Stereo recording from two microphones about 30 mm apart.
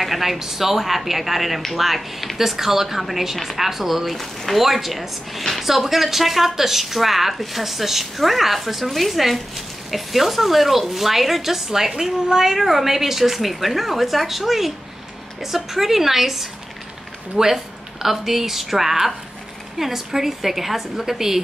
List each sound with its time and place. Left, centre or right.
0.0 s a woman's voice: centre
12.5 s a woman's voice: centre
17.4 s speech: right
18.0 s a woman's voice: centre